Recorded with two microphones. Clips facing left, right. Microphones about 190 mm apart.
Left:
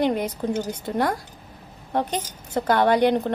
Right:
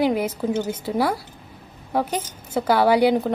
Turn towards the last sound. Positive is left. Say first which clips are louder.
# right 2 dB
turn(degrees=-5)  # may be behind; listen again after turning